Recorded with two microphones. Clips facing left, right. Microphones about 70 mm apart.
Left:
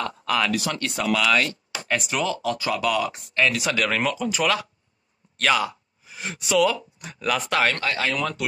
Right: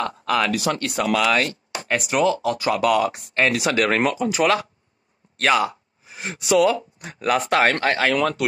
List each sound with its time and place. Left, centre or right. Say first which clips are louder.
0.0 s speech: right 3 dB; right
2.4 s speech: right 4 dB; right
5.4 s a sound: right 3 dB; right
6.5 s speech: right 3 dB; right